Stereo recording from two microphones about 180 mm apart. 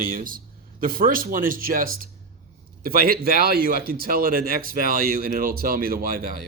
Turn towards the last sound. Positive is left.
turn(degrees=-55)  # may be behind; listen again after turning